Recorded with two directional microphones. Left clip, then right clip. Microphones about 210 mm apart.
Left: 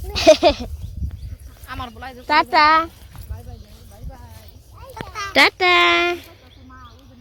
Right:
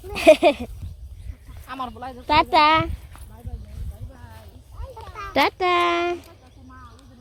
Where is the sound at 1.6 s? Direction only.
35° right (ahead or behind).